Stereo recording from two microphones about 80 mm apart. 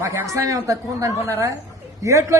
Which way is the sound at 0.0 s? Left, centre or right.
Right.